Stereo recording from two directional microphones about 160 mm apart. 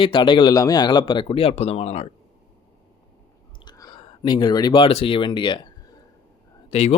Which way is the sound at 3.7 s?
25° left (ahead or behind).